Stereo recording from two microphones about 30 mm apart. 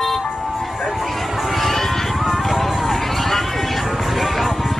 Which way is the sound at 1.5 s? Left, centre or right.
Centre.